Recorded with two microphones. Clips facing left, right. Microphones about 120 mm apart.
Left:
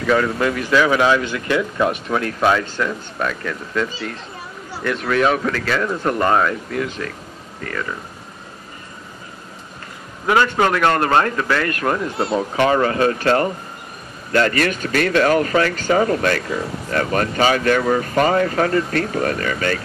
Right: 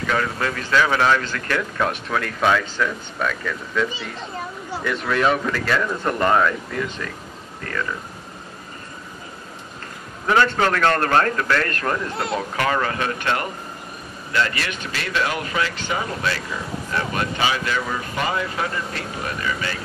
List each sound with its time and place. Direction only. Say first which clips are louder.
0.0 s a man's voice: left 6 dB; 10° left (ahead or behind)
4.8 s speech: left 3 dB; centre (ahead or behind)
10.2 s a man's voice: left 2 dB; 15° left (ahead or behind)
12.5 s speech: left 7 dB; 30° left (ahead or behind)
14.3 s speech: left 6 dB; 45° left (ahead or behind)